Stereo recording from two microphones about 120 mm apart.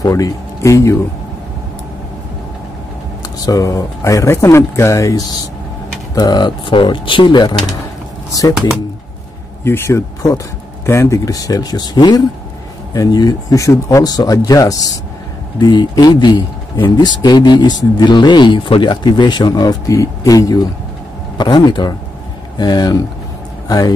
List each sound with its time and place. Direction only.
0.0 s speech: 25° left (ahead or behind)
3.3 s a man's voice: 30° left (ahead or behind)
8.3 s speech: 30° left (ahead or behind)
9.7 s a man's voice: 20° left (ahead or behind)